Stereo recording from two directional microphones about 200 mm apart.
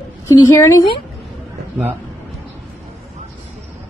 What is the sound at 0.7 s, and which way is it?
Speech, 25° left (ahead or behind).